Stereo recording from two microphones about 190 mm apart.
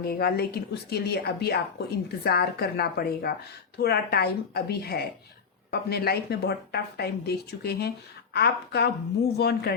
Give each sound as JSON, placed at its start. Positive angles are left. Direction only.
{"t": 0.0, "sound": "a woman's voice", "side_deg": 55}